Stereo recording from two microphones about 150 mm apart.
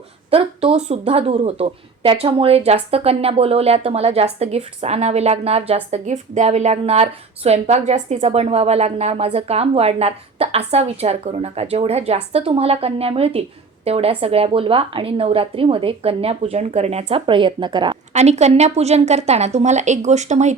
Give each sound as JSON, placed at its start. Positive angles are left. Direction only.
{"t": 0.3, "sound": "a woman's voice", "side_deg": -40}
{"t": 18.1, "sound": "speech", "side_deg": -50}